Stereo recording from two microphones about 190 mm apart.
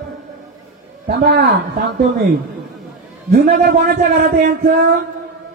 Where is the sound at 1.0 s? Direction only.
55° right (ahead or behind).